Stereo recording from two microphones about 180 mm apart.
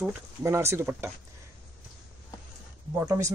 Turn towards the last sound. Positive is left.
turn(degrees=-15)  # may be behind; listen again after turning